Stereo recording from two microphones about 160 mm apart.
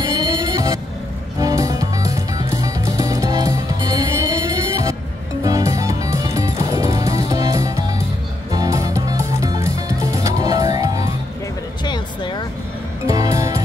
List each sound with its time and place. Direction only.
0.0 s music: 20° right (ahead or behind)
11.8 s music: 30° left (ahead or behind)
13.0 s music: 20° right (ahead or behind)